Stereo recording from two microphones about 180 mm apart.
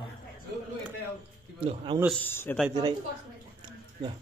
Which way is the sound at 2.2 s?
10° left (ahead or behind).